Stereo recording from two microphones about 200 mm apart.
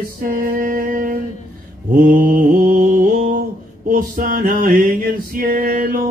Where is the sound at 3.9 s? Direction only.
45° right (ahead or behind).